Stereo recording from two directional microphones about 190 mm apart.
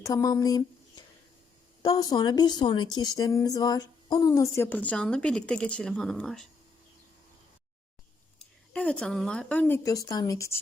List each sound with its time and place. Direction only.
0.0 s speech: 20° left (ahead or behind); by 6.5 s centre (ahead or behind)
8.4 s speech: 5° left (ahead or behind)